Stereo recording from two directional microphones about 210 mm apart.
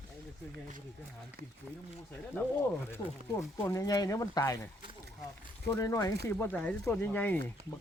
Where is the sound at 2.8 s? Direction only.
10° left (ahead or behind).